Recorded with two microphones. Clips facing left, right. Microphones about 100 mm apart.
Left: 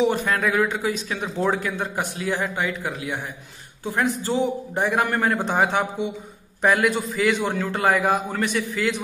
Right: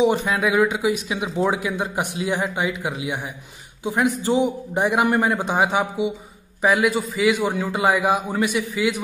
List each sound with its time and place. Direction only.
0.0 s speech: 15° right (ahead or behind)